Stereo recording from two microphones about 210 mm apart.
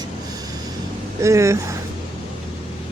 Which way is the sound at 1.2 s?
15° right (ahead or behind).